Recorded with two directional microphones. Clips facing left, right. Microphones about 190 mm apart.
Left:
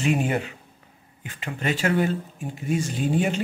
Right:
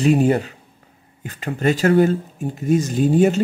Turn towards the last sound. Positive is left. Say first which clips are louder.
# right 8 dB
turn(degrees=-40)  # may be behind; listen again after turning